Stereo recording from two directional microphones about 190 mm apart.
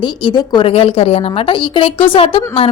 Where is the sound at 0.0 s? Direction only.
25° left (ahead or behind).